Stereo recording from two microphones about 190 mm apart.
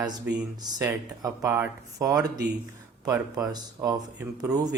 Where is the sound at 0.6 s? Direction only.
20° right (ahead or behind).